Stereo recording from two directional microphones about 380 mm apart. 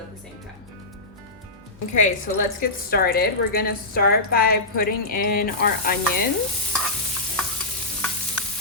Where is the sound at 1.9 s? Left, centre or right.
Centre.